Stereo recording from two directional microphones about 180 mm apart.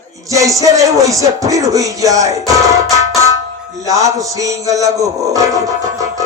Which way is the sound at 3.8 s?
20° right (ahead or behind).